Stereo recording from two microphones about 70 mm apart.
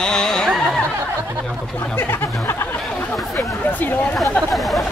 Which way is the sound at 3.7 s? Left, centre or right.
Left.